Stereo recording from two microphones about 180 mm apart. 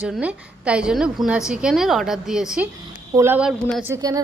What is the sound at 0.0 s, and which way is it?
A woman's voice, 5° right (ahead or behind).